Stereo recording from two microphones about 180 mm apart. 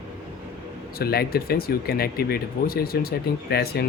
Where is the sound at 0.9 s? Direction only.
60° left (ahead or behind).